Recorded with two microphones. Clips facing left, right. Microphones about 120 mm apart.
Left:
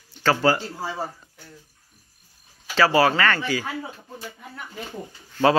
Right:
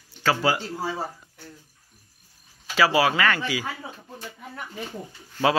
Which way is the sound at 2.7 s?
10° right (ahead or behind).